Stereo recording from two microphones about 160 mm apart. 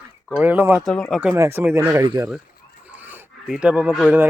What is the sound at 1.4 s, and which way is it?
Speech, 15° right (ahead or behind).